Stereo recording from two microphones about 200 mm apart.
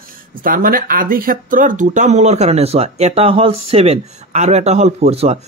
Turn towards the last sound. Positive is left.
turn(degrees=-30)  # may be behind; listen again after turning